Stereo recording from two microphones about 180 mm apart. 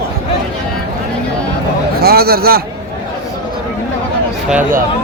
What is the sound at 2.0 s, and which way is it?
Speech, 55° right (ahead or behind).